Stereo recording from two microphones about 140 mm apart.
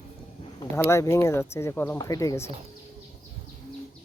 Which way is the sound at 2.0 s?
25° left (ahead or behind).